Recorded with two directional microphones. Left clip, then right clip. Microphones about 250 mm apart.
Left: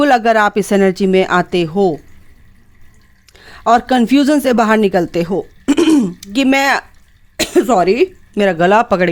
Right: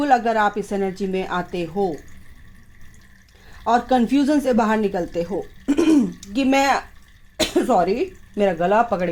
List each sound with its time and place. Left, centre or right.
0.0 s speech: left
3.3 s speech: left